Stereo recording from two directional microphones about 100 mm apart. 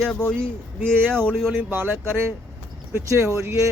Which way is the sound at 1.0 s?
5° left (ahead or behind).